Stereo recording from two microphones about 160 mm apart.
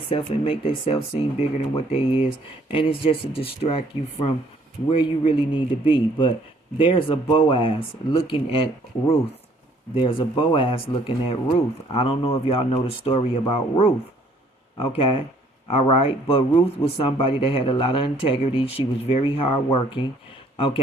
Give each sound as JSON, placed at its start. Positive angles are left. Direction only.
{"t": 0.1, "sound": "speech", "side_deg": 35}